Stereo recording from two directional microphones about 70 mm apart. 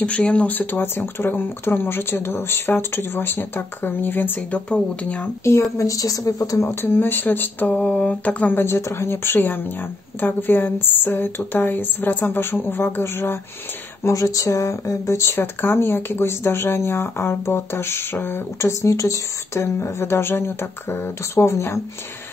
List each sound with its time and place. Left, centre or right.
0.0 s speech: centre
4.6 s speech: centre
5.4 s speech: left
6.7 s a woman's voice: left
8.5 s a woman's voice: left
14.0 s speech: left